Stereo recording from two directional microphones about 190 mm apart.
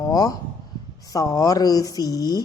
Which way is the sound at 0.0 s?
20° left (ahead or behind).